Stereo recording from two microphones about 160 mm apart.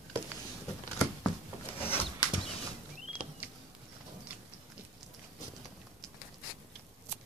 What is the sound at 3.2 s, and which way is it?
Patter, 55° left (ahead or behind).